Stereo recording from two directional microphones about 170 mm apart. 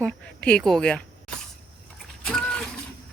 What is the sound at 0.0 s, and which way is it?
Speech, 5° left (ahead or behind).